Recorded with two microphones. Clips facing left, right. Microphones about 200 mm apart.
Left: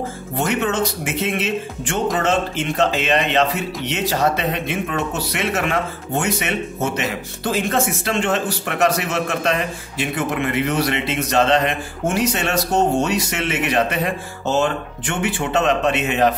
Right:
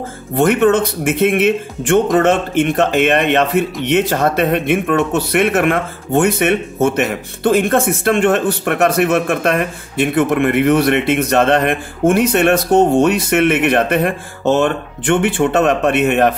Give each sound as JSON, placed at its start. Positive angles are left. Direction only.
{"t": 0.4, "sound": "speech", "side_deg": -55}